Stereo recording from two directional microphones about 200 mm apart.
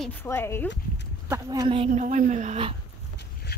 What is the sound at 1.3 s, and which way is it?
Speech, 15° right (ahead or behind).